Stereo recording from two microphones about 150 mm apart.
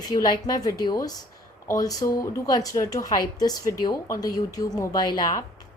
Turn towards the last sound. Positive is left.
turn(degrees=30)  # may be behind; listen again after turning